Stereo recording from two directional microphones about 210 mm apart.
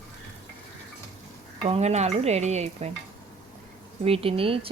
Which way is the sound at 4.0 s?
25° right (ahead or behind).